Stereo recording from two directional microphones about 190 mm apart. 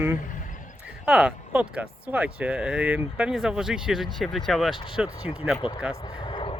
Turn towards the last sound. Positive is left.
turn(degrees=25)  # may be behind; listen again after turning